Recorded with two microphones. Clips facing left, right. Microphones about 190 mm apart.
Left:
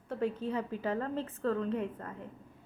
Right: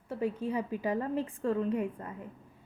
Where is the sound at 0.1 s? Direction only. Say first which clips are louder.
Right 1 dB; 10° right (ahead or behind).